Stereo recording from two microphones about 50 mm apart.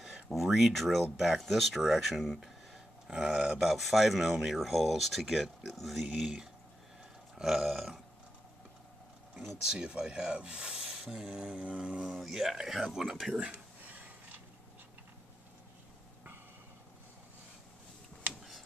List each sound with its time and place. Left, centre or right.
0.3 s speech: centre
1.1 s speech: centre
1.4 s speech: centre
7.3 s speech: centre
9.7 s speech: centre
12.1 s speech: centre
13.4 s a sound: right